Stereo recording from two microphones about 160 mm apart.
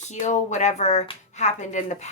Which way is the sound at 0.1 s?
45° left (ahead or behind).